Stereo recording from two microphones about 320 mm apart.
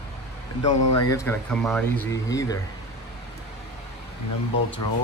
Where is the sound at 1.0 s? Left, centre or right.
Centre.